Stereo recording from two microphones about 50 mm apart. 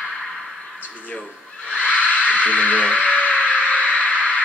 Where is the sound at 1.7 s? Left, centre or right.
Left.